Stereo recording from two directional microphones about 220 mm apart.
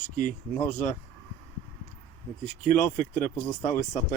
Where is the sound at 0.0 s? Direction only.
35° left (ahead or behind).